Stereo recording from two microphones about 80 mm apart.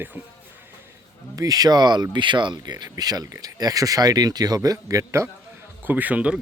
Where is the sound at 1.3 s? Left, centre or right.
Right.